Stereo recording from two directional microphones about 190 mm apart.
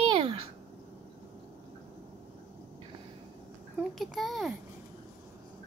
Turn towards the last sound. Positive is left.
turn(degrees=0)  # may be behind; listen again after turning